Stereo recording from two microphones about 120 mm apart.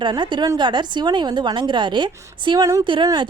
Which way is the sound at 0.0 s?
40° right (ahead or behind).